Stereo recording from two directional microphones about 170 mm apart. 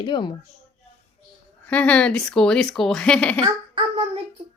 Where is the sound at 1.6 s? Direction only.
10° left (ahead or behind).